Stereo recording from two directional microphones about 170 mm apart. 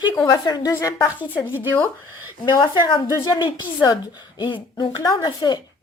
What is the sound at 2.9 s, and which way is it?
Speech, 25° left (ahead or behind).